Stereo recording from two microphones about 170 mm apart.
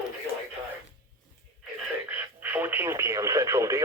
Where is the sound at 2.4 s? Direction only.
10° right (ahead or behind).